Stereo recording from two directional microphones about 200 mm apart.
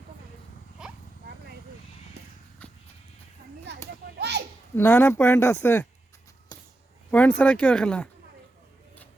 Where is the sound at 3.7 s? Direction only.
60° right (ahead or behind).